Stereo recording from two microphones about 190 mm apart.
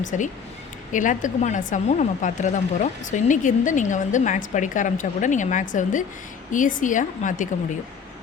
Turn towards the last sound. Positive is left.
turn(degrees=40)  # may be behind; listen again after turning